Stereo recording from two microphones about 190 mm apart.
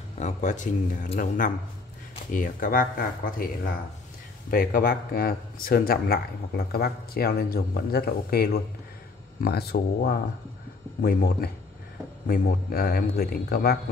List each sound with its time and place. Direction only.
0.2 s speech: 40° left (ahead or behind); by 13.7 s 55° left (ahead or behind)